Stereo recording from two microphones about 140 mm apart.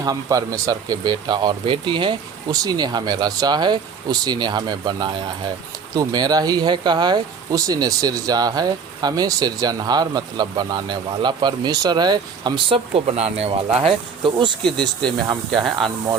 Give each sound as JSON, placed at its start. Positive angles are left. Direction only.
{"t": 0.0, "sound": "speech", "side_deg": -25}
{"t": 13.8, "sound": "speech", "side_deg": -35}
{"t": 15.5, "sound": "speech", "side_deg": 0}